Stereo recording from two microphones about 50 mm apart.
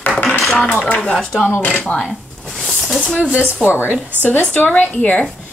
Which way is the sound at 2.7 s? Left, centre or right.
Centre.